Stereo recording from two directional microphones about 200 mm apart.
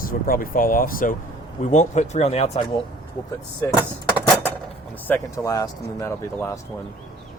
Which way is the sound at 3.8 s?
10° right (ahead or behind).